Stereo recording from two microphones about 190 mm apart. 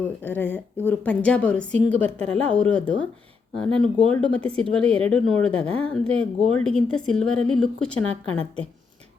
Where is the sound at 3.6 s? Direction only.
5° left (ahead or behind).